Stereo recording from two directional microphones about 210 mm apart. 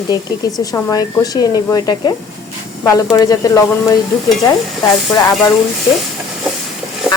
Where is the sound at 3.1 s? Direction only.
15° left (ahead or behind).